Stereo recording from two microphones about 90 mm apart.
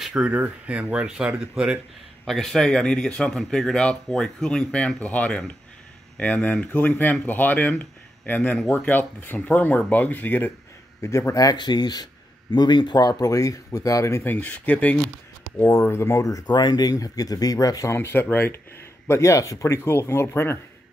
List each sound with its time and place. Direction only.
0.1 s speech: 15° right (ahead or behind)
2.2 s speech: 5° left (ahead or behind); by 10.5 s 20° left (ahead or behind)
11.0 s a man's voice: 30° left (ahead or behind)
14.2 s speech: 20° left (ahead or behind)
15.9 s speech: 30° left (ahead or behind)
16.5 s a man's voice: 50° left (ahead or behind)
17.9 s speech: 25° left (ahead or behind)